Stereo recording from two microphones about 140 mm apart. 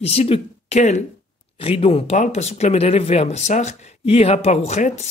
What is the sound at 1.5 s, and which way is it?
Speech, 40° left (ahead or behind).